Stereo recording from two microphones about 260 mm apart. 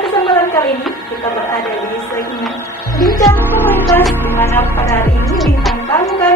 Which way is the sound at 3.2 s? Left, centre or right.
Centre.